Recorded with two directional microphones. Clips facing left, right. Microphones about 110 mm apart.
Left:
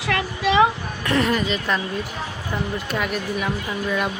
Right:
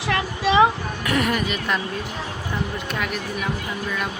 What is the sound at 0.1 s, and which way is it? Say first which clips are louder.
Speech: even; 20° right (ahead or behind).